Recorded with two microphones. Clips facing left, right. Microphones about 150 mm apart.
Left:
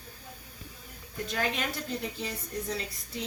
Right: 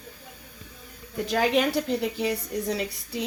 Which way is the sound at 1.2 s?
80° right.